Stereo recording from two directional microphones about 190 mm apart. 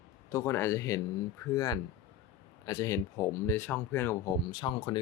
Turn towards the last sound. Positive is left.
turn(degrees=25)  # may be behind; listen again after turning